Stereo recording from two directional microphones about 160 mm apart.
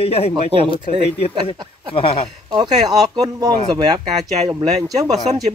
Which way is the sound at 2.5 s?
25° right (ahead or behind).